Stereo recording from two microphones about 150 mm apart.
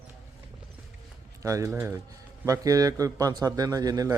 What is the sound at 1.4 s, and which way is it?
A man's voice, 20° right (ahead or behind).